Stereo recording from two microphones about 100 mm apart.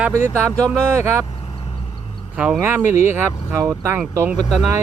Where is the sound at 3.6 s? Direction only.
35° right (ahead or behind).